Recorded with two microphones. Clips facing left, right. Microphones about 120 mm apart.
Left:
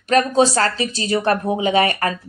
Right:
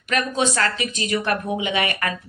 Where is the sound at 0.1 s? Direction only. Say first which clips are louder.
Left 7 dB; 35° left (ahead or behind).